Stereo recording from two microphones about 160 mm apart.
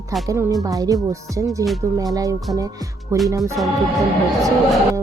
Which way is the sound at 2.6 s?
20° right (ahead or behind).